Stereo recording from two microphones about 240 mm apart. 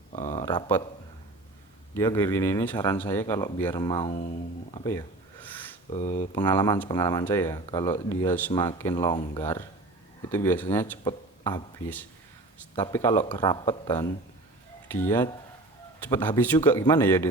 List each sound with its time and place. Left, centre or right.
0.4 s speech: centre
1.9 s speech: centre
4.7 s a sound: centre
5.9 s speech: left
6.3 s speech: centre